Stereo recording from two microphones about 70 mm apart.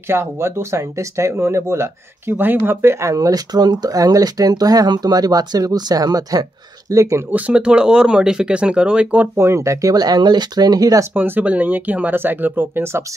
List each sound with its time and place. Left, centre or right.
0.1 s speech: right
3.2 s speech: right
6.9 s speech: right
7.3 s speech: centre
9.4 s speech: right
11.1 s speech: right